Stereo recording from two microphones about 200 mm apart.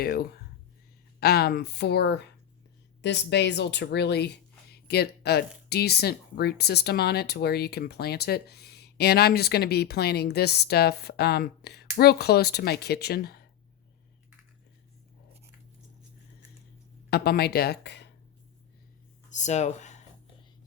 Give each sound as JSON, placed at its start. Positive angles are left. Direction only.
{"t": 0.0, "sound": "speech", "side_deg": 50}
{"t": 17.1, "sound": "speech", "side_deg": 55}
{"t": 19.3, "sound": "speech", "side_deg": 35}